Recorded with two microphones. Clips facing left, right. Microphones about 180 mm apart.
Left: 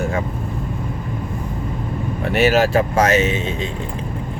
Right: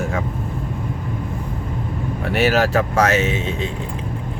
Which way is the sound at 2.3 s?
15° left (ahead or behind).